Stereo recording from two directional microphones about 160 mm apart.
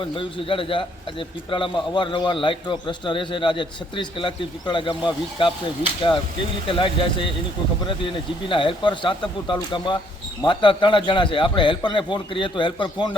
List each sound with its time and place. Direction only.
0.0 s a man's voice: 30° left (ahead or behind)